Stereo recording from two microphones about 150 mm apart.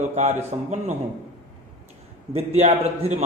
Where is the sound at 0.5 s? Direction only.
40° right (ahead or behind).